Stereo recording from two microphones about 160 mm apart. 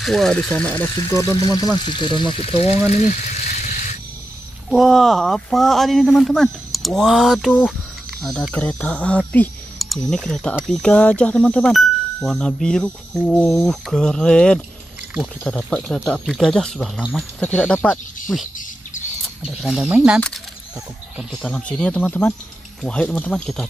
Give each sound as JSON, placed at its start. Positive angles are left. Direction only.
{"t": 0.0, "sound": "speech", "side_deg": 0}
{"t": 0.9, "sound": "speech", "side_deg": 25}
{"t": 2.9, "sound": "a sound", "side_deg": 45}
{"t": 4.6, "sound": "speech", "side_deg": 0}
{"t": 19.6, "sound": "speech", "side_deg": 0}
{"t": 21.2, "sound": "speech", "side_deg": 5}